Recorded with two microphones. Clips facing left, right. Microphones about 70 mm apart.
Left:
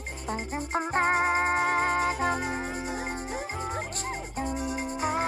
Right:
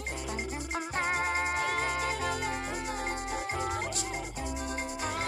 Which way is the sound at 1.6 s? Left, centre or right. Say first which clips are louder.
Left 6 dB; left.